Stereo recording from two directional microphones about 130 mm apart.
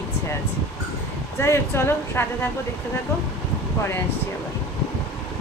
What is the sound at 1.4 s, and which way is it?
Speech, 20° left (ahead or behind).